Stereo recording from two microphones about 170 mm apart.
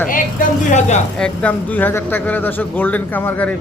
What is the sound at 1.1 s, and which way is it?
A man's voice, 5° left (ahead or behind).